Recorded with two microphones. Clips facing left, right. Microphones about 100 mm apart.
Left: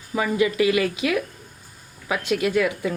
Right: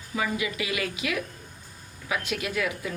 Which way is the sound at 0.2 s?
40° left (ahead or behind).